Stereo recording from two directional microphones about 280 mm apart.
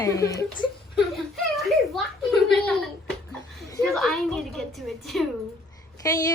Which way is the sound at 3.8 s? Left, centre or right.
Centre.